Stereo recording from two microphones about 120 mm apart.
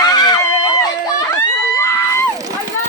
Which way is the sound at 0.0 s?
35° left (ahead or behind).